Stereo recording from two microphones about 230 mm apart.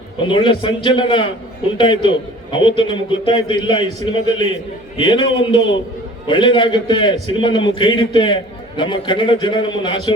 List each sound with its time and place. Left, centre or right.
0.3 s a man's voice: left
4.9 s a man's voice: left